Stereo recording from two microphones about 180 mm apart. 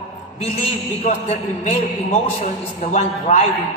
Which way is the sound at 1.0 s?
40° left (ahead or behind).